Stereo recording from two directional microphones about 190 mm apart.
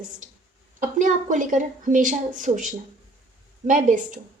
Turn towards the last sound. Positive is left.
turn(degrees=-45)  # may be behind; listen again after turning